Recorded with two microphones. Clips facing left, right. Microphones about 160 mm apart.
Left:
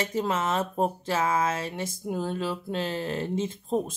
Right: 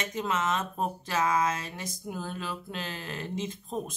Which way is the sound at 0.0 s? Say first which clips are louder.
Left 3 dB; 30° left (ahead or behind).